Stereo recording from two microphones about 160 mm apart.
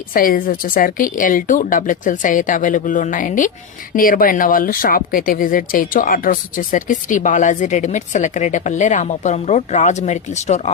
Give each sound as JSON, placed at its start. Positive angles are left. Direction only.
{"t": 0.1, "sound": "speech", "side_deg": 60}